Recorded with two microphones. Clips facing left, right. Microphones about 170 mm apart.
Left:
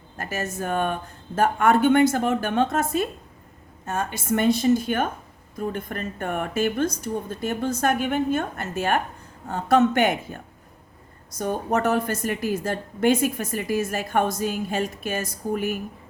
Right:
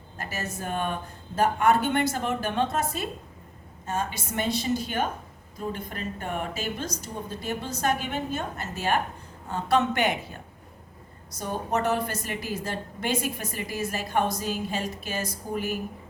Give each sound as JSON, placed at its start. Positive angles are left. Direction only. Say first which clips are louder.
{"t": 0.2, "sound": "a woman's voice", "louder": "left 5 dB", "side_deg": 50}
{"t": 11.3, "sound": "a woman's voice", "louder": "left 5 dB", "side_deg": 50}